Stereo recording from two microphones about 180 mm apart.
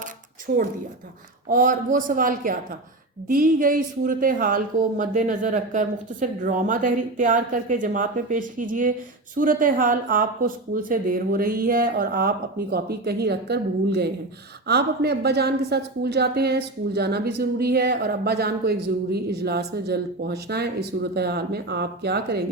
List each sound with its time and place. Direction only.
0.5 s a woman's voice: 50° right (ahead or behind)